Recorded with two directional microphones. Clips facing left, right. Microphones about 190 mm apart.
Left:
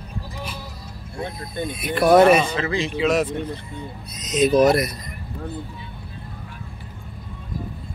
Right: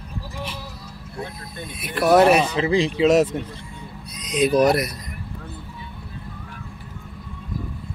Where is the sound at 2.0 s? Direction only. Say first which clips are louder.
Left 1 dB; 5° right (ahead or behind).